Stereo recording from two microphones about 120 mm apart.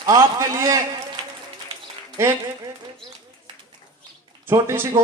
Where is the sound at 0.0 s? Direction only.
30° right (ahead or behind).